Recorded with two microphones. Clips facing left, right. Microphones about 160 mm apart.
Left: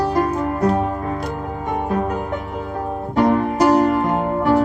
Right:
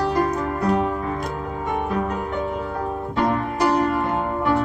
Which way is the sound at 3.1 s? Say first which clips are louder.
Left 7 dB; 45° left (ahead or behind).